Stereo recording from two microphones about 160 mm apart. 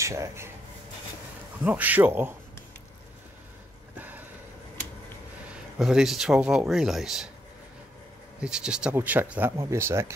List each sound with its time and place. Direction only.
0.0 s speech: 20° right (ahead or behind)
1.6 s speech: 10° right (ahead or behind)
4.0 s a sound: 10° right (ahead or behind)
5.5 s speech: 5° right (ahead or behind)
8.4 s speech: 5° right (ahead or behind)